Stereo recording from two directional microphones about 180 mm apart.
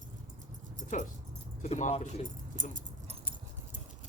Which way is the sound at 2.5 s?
45° right (ahead or behind).